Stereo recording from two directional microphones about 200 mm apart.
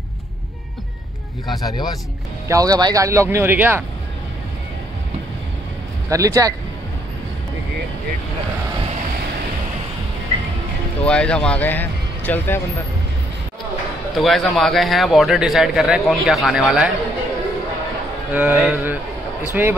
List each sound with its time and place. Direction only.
1.6 s speech: 20° left (ahead or behind)
2.4 s speech: 15° right (ahead or behind)
6.0 s speech: 15° right (ahead or behind)
11.1 s speech: 5° left (ahead or behind)
14.1 s a man's voice: centre (ahead or behind)
18.3 s speech: 10° right (ahead or behind)